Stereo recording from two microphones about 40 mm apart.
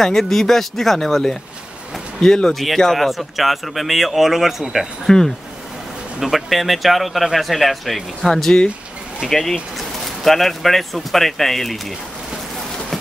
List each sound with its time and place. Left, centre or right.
0.0 s speech: centre
2.2 s speech: centre
2.5 s speech: centre
3.1 s speech: centre
6.3 s speech: centre